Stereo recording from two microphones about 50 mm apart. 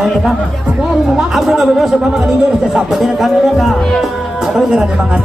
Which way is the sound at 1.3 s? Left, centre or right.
Centre.